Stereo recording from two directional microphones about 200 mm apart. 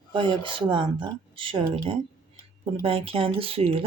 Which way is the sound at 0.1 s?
25° right (ahead or behind).